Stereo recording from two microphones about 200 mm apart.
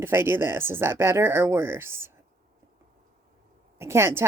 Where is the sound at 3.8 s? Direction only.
15° right (ahead or behind).